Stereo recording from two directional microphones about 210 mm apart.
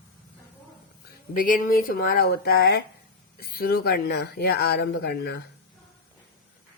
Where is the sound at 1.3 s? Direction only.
40° left (ahead or behind).